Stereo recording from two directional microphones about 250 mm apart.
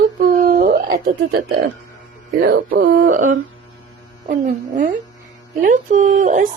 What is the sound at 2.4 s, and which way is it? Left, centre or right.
Speech, right.